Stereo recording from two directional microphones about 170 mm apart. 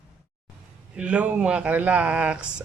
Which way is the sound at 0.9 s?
5° right (ahead or behind).